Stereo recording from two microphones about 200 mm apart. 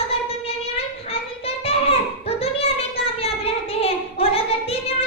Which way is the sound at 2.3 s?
30° left (ahead or behind).